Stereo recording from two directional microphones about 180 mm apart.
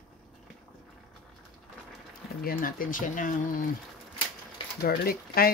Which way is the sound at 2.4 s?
50° left (ahead or behind).